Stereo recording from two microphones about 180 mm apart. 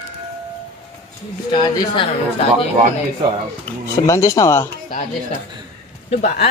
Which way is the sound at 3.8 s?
15° left (ahead or behind).